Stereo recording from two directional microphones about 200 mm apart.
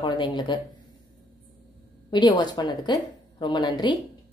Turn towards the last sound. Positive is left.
turn(degrees=20)  # may be behind; listen again after turning